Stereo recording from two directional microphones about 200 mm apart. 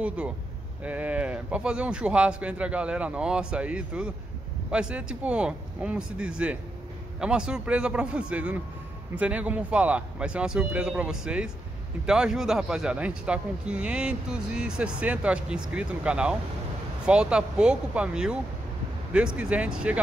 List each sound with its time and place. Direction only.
0.0 s speech: 5° right (ahead or behind)